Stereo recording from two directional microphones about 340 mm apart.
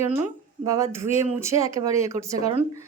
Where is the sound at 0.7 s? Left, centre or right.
Centre.